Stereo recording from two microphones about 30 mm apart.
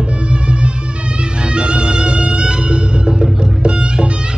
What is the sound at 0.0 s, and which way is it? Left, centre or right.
Music, right.